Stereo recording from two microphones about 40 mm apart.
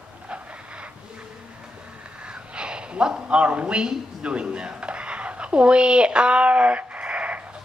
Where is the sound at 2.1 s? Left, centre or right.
Right.